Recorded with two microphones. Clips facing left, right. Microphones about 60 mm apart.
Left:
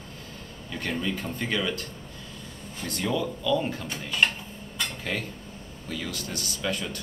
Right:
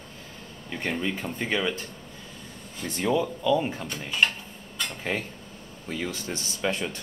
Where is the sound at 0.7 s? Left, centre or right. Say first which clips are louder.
Right 1 dB; right.